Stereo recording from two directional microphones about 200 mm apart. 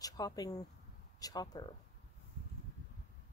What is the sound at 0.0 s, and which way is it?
A woman's voice, 20° left (ahead or behind).